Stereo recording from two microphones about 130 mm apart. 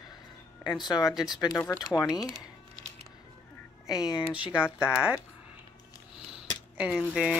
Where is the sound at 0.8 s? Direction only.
30° left (ahead or behind).